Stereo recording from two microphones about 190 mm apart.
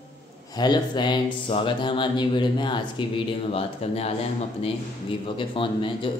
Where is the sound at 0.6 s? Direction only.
20° left (ahead or behind).